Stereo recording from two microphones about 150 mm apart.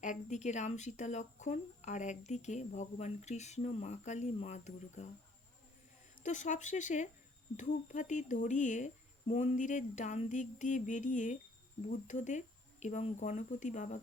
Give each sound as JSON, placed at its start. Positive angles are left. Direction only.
{"t": 0.0, "sound": "speech", "side_deg": 55}
{"t": 6.2, "sound": "speech", "side_deg": 55}